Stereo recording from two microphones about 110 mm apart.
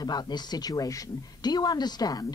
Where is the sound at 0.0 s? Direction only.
40° left (ahead or behind).